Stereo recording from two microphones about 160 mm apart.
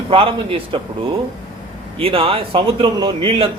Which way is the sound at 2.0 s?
35° right (ahead or behind).